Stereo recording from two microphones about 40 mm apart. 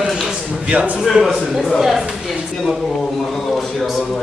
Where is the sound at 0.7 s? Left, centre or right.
Right.